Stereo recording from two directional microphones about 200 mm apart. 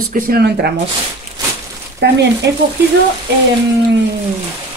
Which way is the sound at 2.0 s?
60° right (ahead or behind).